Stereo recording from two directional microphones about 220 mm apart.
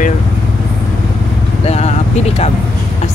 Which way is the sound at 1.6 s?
30° left (ahead or behind).